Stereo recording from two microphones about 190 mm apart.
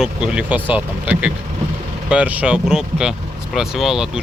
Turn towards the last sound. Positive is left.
turn(degrees=0)  # may be behind; listen again after turning